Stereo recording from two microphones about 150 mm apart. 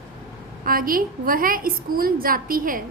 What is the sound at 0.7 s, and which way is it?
A woman's voice, 70° right (ahead or behind).